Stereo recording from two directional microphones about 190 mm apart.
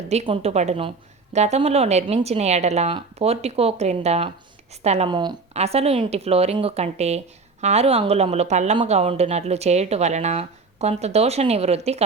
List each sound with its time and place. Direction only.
0.1 s speech: 35° right (ahead or behind)